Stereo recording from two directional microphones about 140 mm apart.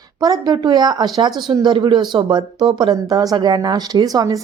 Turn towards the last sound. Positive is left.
turn(degrees=-25)  # may be behind; listen again after turning